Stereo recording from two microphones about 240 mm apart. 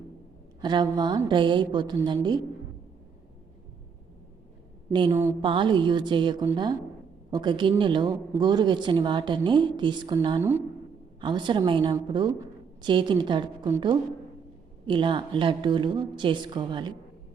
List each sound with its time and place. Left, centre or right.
0.6 s a woman's voice: centre
4.9 s a woman's voice: centre